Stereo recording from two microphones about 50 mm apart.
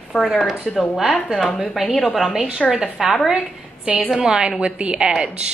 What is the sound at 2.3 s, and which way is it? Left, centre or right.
A woman's voice, centre.